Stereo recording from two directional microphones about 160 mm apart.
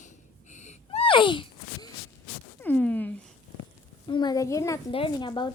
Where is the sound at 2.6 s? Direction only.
10° left (ahead or behind).